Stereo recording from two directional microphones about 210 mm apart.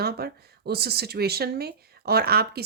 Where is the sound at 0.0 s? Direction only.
50° right (ahead or behind).